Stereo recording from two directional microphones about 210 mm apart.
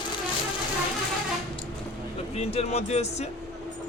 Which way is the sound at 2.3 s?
30° left (ahead or behind).